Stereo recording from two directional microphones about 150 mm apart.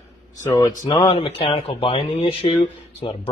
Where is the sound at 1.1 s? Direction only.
35° left (ahead or behind).